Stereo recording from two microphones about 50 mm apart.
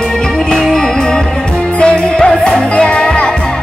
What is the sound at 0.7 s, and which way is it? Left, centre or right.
Music, centre.